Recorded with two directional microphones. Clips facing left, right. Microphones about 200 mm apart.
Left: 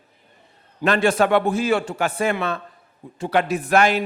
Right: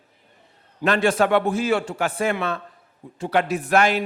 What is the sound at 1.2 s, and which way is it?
Speech, 25° left (ahead or behind).